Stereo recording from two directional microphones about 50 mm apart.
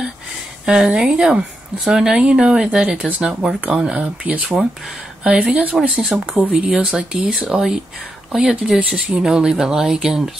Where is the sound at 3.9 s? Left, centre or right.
Right.